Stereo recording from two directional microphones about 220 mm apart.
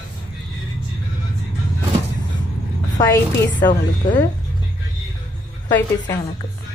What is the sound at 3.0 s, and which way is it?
A woman's voice, 15° left (ahead or behind).